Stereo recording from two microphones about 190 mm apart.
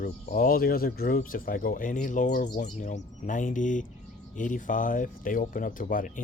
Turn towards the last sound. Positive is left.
turn(degrees=45)  # may be behind; listen again after turning